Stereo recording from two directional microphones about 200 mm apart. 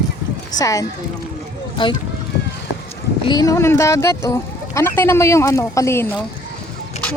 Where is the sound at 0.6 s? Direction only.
15° left (ahead or behind).